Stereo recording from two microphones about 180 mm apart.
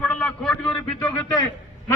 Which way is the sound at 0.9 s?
20° left (ahead or behind).